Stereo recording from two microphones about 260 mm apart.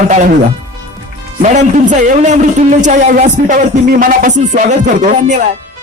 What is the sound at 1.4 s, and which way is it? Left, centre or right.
Speech, right.